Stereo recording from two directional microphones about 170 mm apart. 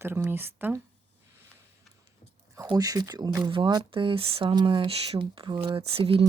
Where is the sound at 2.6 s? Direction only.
20° right (ahead or behind).